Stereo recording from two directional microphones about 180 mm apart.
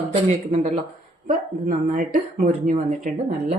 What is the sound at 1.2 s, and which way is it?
A woman's voice, 45° right (ahead or behind).